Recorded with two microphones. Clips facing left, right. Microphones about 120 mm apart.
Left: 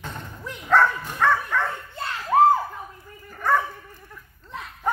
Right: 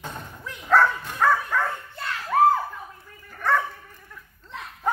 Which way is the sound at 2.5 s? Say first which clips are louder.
Left 1 dB; 15° left (ahead or behind).